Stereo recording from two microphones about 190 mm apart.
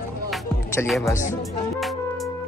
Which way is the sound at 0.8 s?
Centre (ahead or behind).